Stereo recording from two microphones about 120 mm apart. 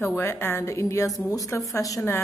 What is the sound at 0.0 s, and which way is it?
A woman's voice, 20° left (ahead or behind).